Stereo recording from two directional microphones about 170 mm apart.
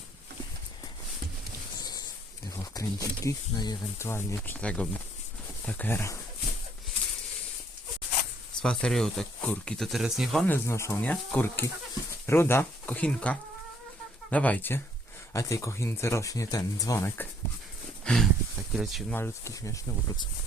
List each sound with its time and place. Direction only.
1.8 s a sound: 25° left (ahead or behind)
2.7 s speech: 20° left (ahead or behind)
8.6 s speech: 5° left (ahead or behind)
10.4 s speech: 15° left (ahead or behind)
18.0 s speech: 5° left (ahead or behind)
19.1 s speech: 15° left (ahead or behind)